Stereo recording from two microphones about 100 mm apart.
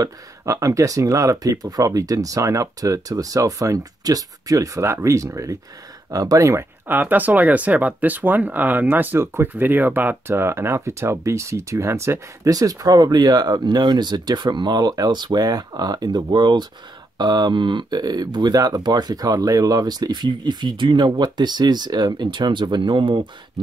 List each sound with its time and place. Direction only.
0.0 s speech: 35° right (ahead or behind)
6.9 s speech: 15° right (ahead or behind); by 23.2 s 55° right (ahead or behind)